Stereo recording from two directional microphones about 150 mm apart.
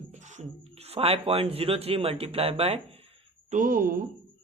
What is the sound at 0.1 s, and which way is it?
Speech, 50° right (ahead or behind).